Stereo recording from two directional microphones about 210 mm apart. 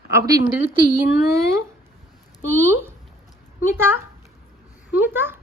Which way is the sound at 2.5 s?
10° right (ahead or behind).